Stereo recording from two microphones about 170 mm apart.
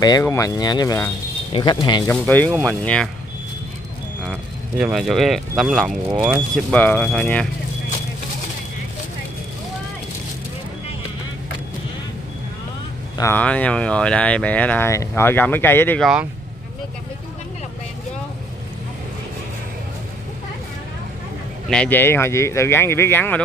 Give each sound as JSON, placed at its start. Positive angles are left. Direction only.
{"t": 0.0, "sound": "speech", "side_deg": 20}
{"t": 2.0, "sound": "speech", "side_deg": 10}
{"t": 4.2, "sound": "speech", "side_deg": 0}
{"t": 13.2, "sound": "speech", "side_deg": 10}
{"t": 16.0, "sound": "speech", "side_deg": -5}
{"t": 21.6, "sound": "speech", "side_deg": 5}